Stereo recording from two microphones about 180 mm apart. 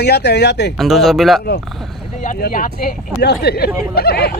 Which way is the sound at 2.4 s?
50° left (ahead or behind).